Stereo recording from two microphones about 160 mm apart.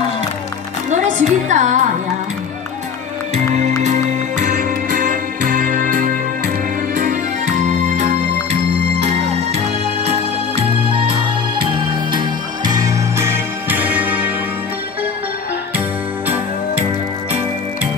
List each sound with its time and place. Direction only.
0.8 s music: 50° right (ahead or behind)
3.8 s music: 50° right (ahead or behind)
9.0 s music: 40° right (ahead or behind); by 14.3 s 10° right (ahead or behind)